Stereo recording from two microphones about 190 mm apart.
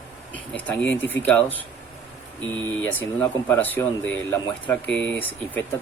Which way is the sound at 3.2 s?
10° left (ahead or behind).